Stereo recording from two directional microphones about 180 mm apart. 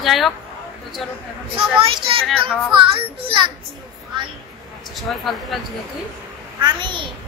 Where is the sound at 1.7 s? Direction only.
30° right (ahead or behind).